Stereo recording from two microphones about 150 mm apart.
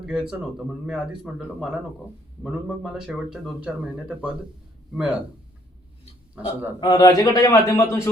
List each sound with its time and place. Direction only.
0.0 s speech: 5° right (ahead or behind)
6.3 s a man's voice: 10° right (ahead or behind)
6.7 s a man's voice: 25° left (ahead or behind)